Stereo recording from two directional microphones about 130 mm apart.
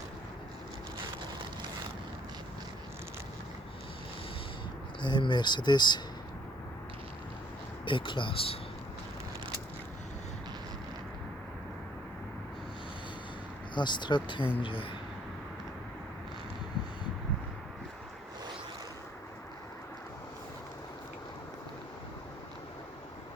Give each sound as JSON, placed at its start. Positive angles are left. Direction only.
{"t": 5.0, "sound": "speech", "side_deg": 35}
{"t": 7.9, "sound": "speech", "side_deg": 40}
{"t": 13.7, "sound": "speech", "side_deg": 35}